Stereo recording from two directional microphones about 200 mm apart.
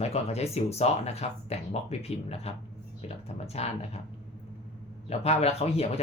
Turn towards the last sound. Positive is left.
turn(degrees=30)  # may be behind; listen again after turning